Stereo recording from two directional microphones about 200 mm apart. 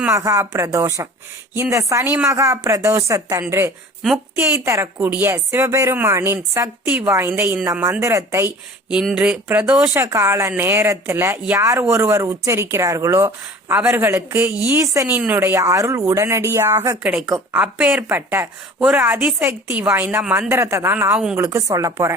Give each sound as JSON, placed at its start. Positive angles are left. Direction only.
{"t": 0.0, "sound": "speech", "side_deg": -15}
{"t": 4.0, "sound": "a woman's voice", "side_deg": 0}
{"t": 4.5, "sound": "speech", "side_deg": -15}